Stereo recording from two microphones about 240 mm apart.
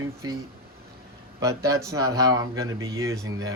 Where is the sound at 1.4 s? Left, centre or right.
Centre.